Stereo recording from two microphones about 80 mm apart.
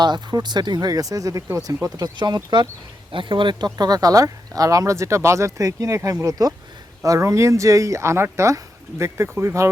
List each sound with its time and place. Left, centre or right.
0.0 s speech: right
2.1 s speech: right
3.1 s speech: right